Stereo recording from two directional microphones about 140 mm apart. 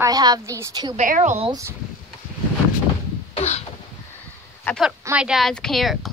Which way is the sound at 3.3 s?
50° left (ahead or behind).